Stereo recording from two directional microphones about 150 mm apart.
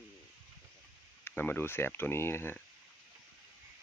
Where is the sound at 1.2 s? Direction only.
15° left (ahead or behind).